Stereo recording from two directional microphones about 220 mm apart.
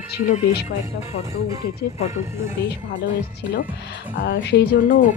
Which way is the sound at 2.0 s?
30° left (ahead or behind).